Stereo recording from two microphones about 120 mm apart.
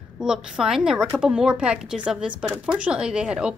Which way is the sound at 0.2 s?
5° right (ahead or behind).